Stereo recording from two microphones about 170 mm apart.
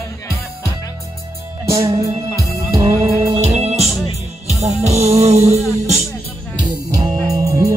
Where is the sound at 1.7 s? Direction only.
20° right (ahead or behind).